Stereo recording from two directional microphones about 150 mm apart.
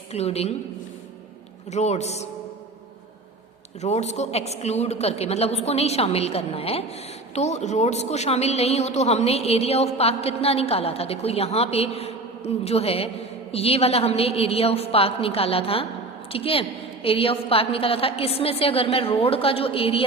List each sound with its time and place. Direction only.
0.1 s a woman's voice: 45° left (ahead or behind)
1.7 s a woman's voice: 50° left (ahead or behind)
3.8 s a woman's voice: 45° left (ahead or behind)